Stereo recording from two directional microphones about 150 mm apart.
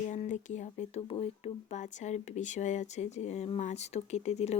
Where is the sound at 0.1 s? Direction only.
55° left (ahead or behind).